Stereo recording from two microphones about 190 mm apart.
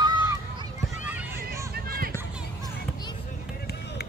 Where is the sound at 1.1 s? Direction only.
10° right (ahead or behind).